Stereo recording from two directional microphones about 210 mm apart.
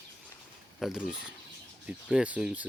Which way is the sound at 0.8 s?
Centre (ahead or behind).